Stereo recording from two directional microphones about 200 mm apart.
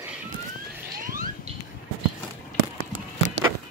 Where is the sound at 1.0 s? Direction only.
45° right (ahead or behind).